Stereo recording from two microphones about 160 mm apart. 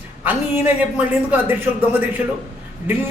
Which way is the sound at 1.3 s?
10° right (ahead or behind).